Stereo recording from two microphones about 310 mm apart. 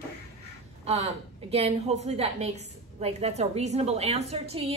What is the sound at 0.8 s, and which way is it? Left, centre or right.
A woman's voice, centre.